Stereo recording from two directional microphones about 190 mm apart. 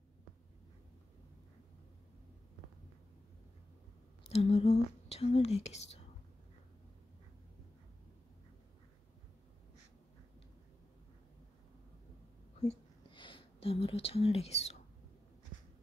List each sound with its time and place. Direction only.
4.3 s speech: 30° left (ahead or behind)
12.6 s whispering: 25° left (ahead or behind)